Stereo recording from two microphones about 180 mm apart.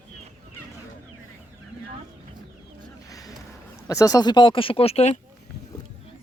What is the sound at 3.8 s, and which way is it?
Speech, 20° left (ahead or behind).